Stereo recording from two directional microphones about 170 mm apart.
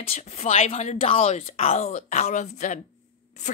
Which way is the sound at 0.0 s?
40° left (ahead or behind).